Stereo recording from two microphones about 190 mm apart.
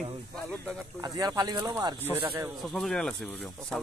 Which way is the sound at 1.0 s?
20° right (ahead or behind).